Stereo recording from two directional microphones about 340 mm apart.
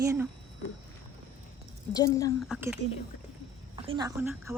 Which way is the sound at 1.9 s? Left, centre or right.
Centre.